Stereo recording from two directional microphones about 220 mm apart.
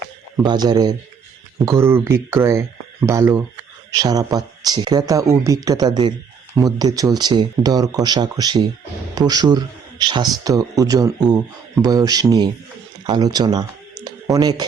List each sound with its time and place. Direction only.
0.4 s a man's voice: 20° right (ahead or behind)